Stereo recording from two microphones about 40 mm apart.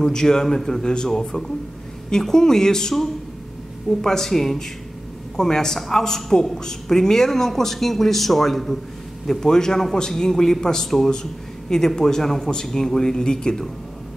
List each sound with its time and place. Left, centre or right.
0.0 s a man's voice: centre
4.0 s a man's voice: centre